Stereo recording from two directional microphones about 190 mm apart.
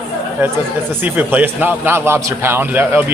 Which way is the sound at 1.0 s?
10° right (ahead or behind).